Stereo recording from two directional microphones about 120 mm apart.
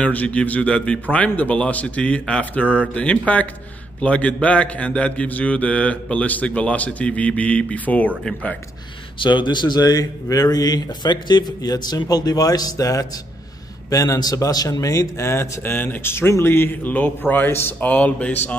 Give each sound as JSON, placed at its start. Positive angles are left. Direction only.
{"t": 0.0, "sound": "a man's voice", "side_deg": 10}
{"t": 9.2, "sound": "a man's voice", "side_deg": 40}